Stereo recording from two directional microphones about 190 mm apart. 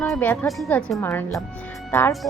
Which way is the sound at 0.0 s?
10° left (ahead or behind).